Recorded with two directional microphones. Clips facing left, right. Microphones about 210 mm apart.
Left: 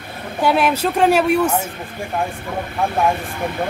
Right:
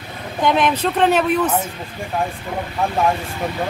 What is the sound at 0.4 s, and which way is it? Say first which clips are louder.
A woman's voice: left 1 dB; 5° left (ahead or behind).